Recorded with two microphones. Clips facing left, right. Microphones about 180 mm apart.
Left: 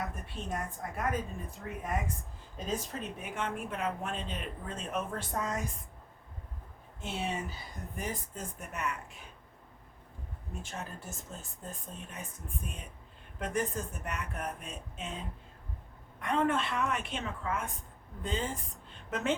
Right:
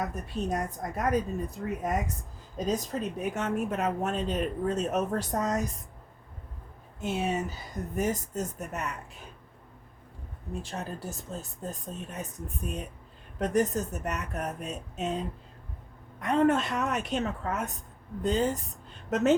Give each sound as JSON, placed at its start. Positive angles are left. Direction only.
{"t": 0.0, "sound": "a woman's voice", "side_deg": -40}
{"t": 7.0, "sound": "a woman's voice", "side_deg": -45}
{"t": 10.6, "sound": "a woman's voice", "side_deg": -35}
{"t": 16.2, "sound": "a woman's voice", "side_deg": -40}